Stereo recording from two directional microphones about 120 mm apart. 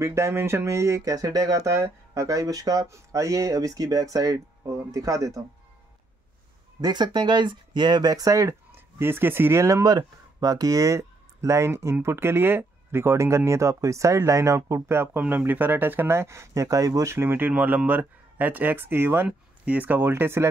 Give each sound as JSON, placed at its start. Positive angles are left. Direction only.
{"t": 0.0, "sound": "speech", "side_deg": -25}
{"t": 6.8, "sound": "speech", "side_deg": -35}